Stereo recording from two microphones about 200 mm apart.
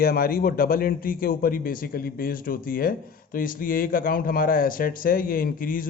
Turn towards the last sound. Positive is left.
turn(degrees=45)  # may be behind; listen again after turning